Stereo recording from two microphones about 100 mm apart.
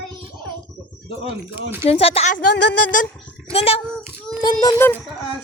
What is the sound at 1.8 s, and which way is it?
Speech, 85° left.